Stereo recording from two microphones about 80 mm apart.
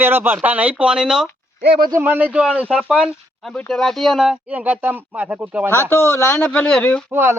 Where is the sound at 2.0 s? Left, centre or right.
Right.